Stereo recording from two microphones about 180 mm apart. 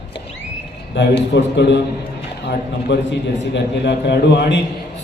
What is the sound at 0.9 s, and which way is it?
A man's voice, 75° left (ahead or behind).